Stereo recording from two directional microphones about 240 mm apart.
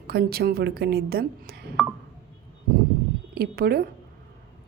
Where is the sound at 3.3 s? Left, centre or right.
Right.